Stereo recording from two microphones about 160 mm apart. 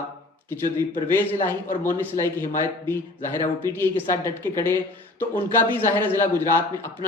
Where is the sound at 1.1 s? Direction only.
15° left (ahead or behind).